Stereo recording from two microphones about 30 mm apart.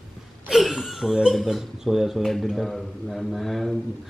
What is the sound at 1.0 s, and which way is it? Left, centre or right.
Music, centre.